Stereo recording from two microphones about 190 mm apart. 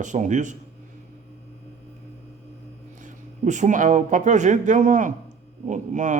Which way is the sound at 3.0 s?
40° right (ahead or behind).